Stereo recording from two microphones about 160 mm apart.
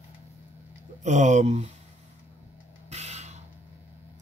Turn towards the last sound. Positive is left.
turn(degrees=-45)  # may be behind; listen again after turning